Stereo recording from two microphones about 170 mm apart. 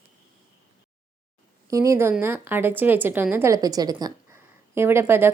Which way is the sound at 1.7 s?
20° right (ahead or behind).